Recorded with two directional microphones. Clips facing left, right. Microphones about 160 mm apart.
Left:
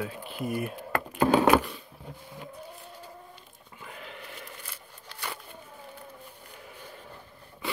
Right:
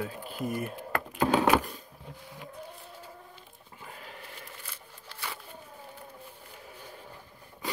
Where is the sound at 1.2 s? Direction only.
50° left (ahead or behind).